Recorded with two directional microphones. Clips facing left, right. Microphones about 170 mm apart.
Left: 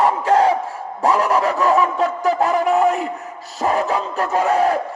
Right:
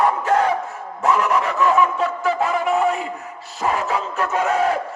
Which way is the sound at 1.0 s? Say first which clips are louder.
Left 2 dB; 35° left (ahead or behind).